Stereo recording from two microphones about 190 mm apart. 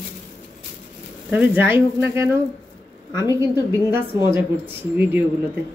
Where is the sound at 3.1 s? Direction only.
20° left (ahead or behind).